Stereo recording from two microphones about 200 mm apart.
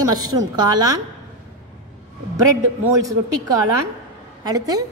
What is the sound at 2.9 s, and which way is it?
Speech, 15° right (ahead or behind).